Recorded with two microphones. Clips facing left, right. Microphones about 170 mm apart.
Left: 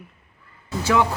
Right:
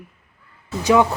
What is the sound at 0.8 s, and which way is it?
Speech, 15° right (ahead or behind).